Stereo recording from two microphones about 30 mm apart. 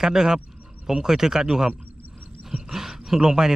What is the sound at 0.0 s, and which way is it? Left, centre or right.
Speech, centre.